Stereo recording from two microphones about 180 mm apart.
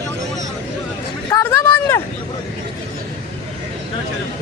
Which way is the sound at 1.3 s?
15° left (ahead or behind).